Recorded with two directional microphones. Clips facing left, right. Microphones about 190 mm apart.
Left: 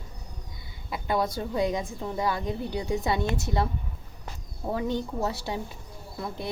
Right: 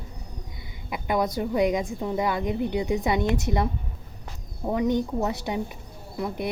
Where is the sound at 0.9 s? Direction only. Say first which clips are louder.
Right 2 dB; 20° right (ahead or behind).